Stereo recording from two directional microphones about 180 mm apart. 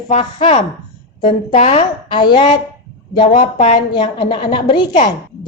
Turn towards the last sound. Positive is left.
turn(degrees=25)  # may be behind; listen again after turning